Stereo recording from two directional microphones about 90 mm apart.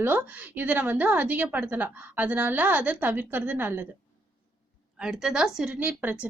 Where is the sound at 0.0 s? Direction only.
20° right (ahead or behind).